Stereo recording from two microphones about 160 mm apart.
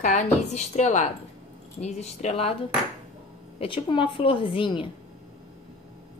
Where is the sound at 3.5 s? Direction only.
35° left (ahead or behind).